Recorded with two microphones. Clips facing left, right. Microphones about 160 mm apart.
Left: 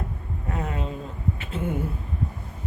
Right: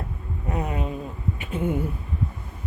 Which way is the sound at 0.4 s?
15° right (ahead or behind).